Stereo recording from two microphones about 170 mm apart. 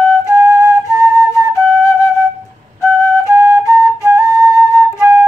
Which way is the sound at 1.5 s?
20° left (ahead or behind).